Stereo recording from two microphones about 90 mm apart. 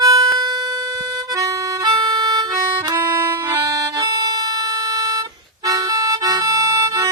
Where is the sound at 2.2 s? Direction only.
50° right (ahead or behind).